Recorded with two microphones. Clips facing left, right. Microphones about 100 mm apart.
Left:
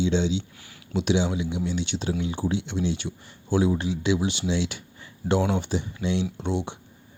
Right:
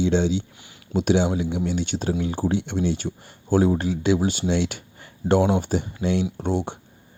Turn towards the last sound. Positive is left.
turn(degrees=-50)  # may be behind; listen again after turning